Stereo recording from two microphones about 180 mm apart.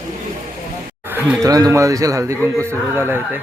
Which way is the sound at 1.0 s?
10° right (ahead or behind).